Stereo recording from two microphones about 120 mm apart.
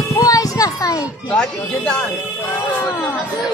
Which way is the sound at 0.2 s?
30° left (ahead or behind).